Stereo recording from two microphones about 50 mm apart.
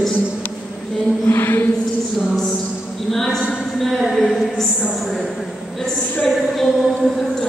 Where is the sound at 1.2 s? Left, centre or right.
Left.